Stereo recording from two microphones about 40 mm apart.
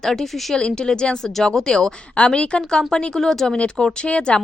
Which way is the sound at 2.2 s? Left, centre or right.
Left.